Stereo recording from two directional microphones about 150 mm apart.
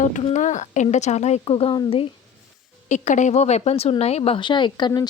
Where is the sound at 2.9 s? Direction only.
55° left (ahead or behind); by 5.0 s 30° left (ahead or behind).